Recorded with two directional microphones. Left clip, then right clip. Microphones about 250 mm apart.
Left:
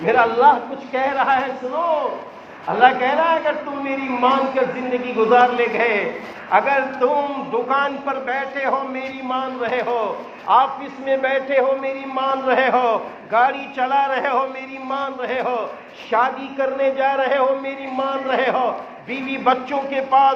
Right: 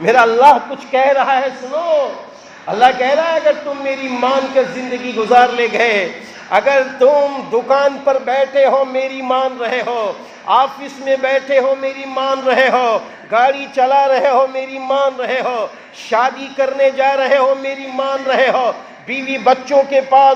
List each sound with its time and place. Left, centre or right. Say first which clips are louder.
0.0 s a man's voice: right 5 dB; right
2.8 s a man's voice: right 3 dB; right